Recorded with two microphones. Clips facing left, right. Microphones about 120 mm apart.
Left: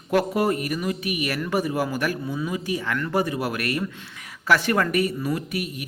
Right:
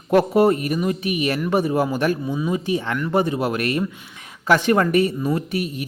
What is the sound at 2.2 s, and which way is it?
Speech, 15° right (ahead or behind).